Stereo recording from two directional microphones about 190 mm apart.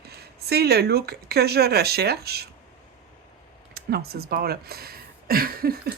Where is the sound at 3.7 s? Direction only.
55° right (ahead or behind).